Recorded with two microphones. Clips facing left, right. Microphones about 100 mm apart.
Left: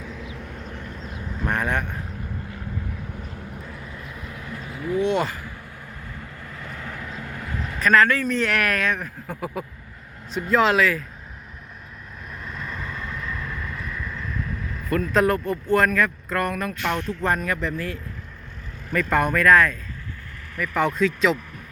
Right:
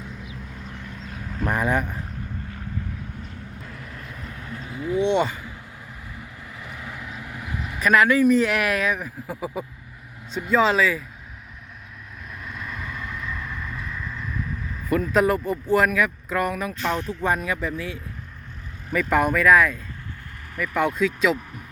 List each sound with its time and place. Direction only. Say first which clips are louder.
1.5 s speech: right 2 dB; 5° right (ahead or behind)
4.4 s vehicle: right 1 dB; 30° right (ahead or behind)
5.0 s speech: right 3 dB; centre (ahead or behind)
6.1 s vehicle: left 2 dB; 15° right (ahead or behind)
10.3 s speech: even; centre (ahead or behind)
12.5 s vehicle: left 1 dB; 5° right (ahead or behind)
14.8 s speech: even; 10° right (ahead or behind)